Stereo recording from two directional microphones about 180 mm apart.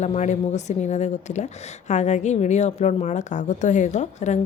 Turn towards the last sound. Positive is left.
turn(degrees=40)  # may be behind; listen again after turning